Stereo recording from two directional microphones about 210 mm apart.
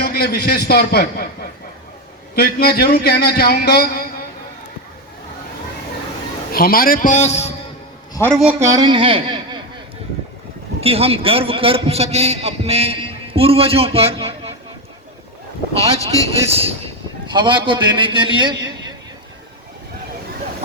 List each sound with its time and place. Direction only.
0.0 s a man's voice: 45° left (ahead or behind)
6.5 s a man's voice: 45° left (ahead or behind)
8.3 s a man's voice: 5° right (ahead or behind); by 9.6 s 25° right (ahead or behind)
10.8 s a man's voice: 30° right (ahead or behind)
16.5 s a man's voice: 30° right (ahead or behind)